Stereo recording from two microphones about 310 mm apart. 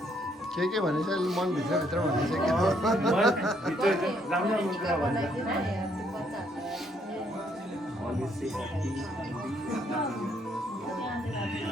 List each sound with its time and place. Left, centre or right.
0.6 s speech: centre